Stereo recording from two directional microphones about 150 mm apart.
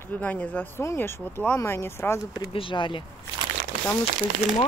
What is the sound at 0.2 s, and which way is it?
Speech, 10° left (ahead or behind).